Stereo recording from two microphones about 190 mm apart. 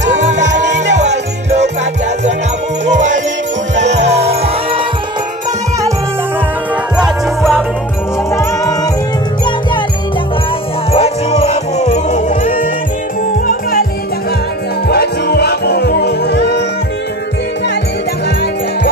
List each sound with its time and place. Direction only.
0.0 s music: 40° right (ahead or behind)
2.9 s music: 40° right (ahead or behind)
8.3 s music: 15° left (ahead or behind)
10.9 s music: 35° left (ahead or behind); by 13.8 s 50° left (ahead or behind)
14.9 s music: 55° left (ahead or behind)